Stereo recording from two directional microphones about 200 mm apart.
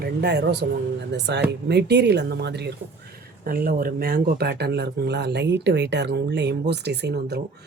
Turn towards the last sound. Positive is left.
turn(degrees=-55)  # may be behind; listen again after turning